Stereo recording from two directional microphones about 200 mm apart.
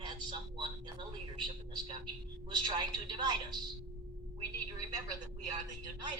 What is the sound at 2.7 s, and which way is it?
Speech, 20° right (ahead or behind).